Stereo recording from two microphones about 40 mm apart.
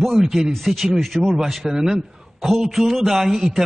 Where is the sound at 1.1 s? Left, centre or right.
Right.